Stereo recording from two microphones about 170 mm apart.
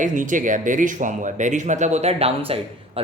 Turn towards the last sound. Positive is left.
turn(degrees=-35)  # may be behind; listen again after turning